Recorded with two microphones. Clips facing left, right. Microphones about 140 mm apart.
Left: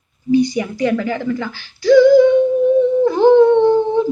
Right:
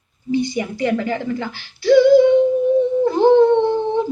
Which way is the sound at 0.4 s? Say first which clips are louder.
Left 2 dB; 20° right (ahead or behind).